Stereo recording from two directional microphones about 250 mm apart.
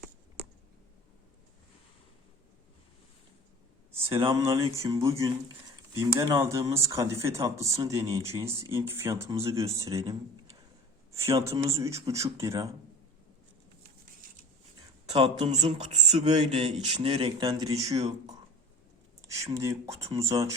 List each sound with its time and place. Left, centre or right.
4.3 s speech: centre
15.0 s speech: right
19.3 s speech: centre